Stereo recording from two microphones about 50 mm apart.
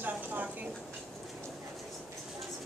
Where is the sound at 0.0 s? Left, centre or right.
Right.